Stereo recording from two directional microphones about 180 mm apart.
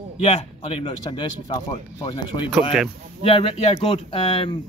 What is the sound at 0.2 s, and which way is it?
A man's voice, 35° left (ahead or behind).